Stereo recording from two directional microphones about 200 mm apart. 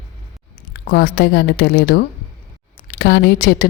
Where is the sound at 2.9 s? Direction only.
55° left (ahead or behind).